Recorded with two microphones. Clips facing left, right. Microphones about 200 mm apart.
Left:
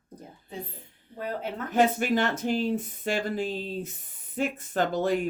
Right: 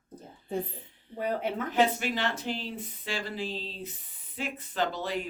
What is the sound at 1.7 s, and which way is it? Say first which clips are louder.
Speech: left 5 dB; 50° left (ahead or behind).